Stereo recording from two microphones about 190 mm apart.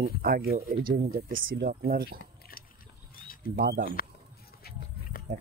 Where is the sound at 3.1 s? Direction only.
50° left (ahead or behind).